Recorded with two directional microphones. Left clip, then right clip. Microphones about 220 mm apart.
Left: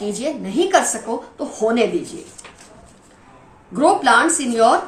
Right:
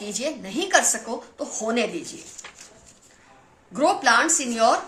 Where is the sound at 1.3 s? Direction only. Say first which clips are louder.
Left 7 dB; 40° right (ahead or behind).